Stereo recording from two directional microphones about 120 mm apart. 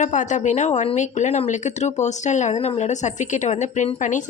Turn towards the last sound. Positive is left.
turn(degrees=90)